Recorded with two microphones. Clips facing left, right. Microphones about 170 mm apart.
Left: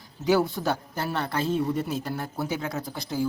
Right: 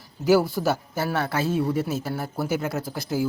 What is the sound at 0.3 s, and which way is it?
A man's voice, 5° right (ahead or behind).